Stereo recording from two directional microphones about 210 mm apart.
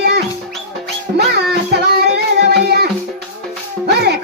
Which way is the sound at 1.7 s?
50° right (ahead or behind).